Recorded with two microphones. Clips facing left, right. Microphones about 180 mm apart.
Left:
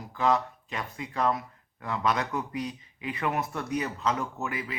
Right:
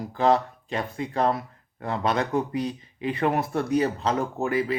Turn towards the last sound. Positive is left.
turn(degrees=-35)  # may be behind; listen again after turning